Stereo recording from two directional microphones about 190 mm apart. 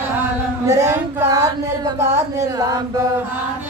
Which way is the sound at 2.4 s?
20° right (ahead or behind).